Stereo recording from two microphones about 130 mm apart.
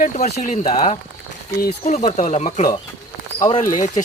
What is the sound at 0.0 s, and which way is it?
Speech, 70° left (ahead or behind).